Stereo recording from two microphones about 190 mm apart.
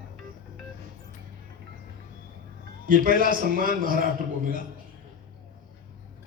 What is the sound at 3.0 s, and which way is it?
A man's voice, 50° right (ahead or behind).